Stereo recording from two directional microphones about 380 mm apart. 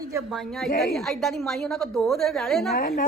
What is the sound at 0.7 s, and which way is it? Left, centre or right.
Speech, left.